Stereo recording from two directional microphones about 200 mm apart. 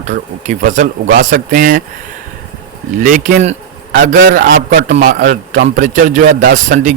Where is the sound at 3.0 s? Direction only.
40° right (ahead or behind).